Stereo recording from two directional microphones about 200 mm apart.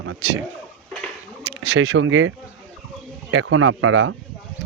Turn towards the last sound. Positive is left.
turn(degrees=-75)  # may be behind; listen again after turning